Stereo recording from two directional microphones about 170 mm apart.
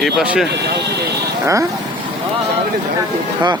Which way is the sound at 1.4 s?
20° right (ahead or behind).